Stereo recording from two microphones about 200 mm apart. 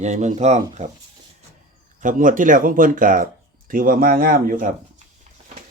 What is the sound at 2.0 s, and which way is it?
Speech, 40° right (ahead or behind).